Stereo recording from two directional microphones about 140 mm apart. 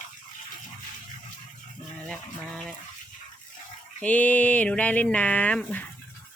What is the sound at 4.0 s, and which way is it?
Speech, 10° left (ahead or behind).